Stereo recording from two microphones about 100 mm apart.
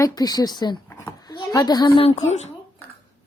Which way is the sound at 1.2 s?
40° left (ahead or behind).